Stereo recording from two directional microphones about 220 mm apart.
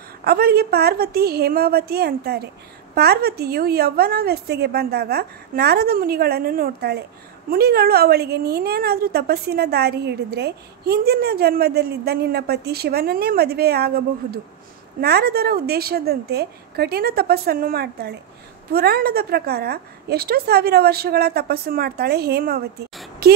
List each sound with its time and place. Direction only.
0.2 s a woman's voice: 45° right (ahead or behind)